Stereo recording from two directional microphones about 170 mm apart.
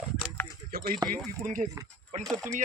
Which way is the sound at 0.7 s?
60° right (ahead or behind).